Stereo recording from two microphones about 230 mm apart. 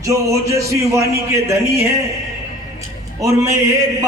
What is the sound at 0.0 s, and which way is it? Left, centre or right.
Speech, centre.